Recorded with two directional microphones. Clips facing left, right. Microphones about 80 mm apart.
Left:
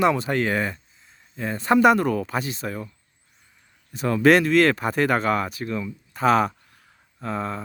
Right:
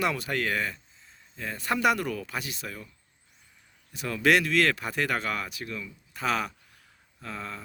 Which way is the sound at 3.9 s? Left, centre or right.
Left.